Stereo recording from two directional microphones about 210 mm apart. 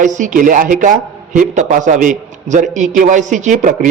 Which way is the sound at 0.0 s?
35° right (ahead or behind).